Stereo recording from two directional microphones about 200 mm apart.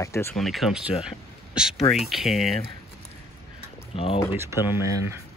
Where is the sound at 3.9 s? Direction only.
30° left (ahead or behind).